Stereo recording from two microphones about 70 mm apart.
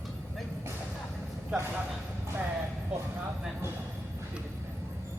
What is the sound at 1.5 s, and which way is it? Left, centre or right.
Speech, centre.